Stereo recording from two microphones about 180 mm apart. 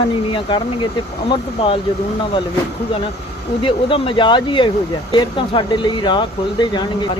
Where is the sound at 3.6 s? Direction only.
30° left (ahead or behind).